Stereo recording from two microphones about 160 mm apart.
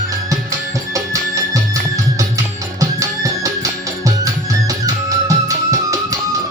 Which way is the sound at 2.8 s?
20° right (ahead or behind).